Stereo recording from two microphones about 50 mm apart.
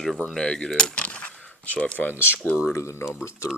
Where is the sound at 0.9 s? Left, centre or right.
Left.